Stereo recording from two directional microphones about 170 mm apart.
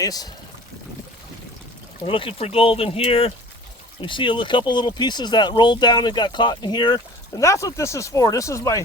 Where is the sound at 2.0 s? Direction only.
30° left (ahead or behind).